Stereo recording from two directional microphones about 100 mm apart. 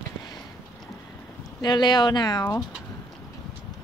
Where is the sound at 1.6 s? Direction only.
45° left (ahead or behind).